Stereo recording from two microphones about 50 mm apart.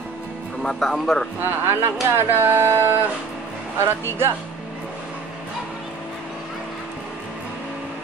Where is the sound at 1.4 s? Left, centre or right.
Right.